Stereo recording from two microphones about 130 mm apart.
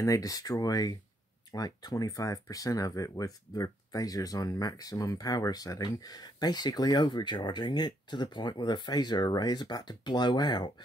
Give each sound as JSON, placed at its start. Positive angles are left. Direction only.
{"t": 0.0, "sound": "speech", "side_deg": 25}